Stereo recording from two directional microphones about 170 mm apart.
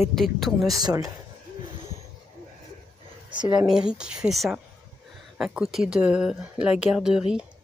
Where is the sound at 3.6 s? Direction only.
5° right (ahead or behind).